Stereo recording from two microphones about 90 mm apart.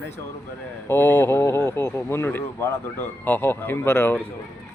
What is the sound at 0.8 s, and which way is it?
Speech, 25° left (ahead or behind).